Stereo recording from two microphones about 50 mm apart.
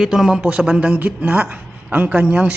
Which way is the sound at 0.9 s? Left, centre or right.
Right.